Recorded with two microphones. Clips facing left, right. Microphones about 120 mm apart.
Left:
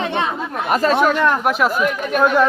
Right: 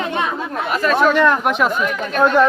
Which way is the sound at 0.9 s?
Centre (ahead or behind).